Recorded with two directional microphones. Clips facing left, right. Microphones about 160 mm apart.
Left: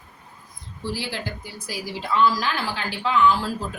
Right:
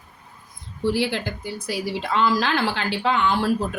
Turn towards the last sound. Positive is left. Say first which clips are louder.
# left 1 dB
turn(degrees=-70)  # may be behind; listen again after turning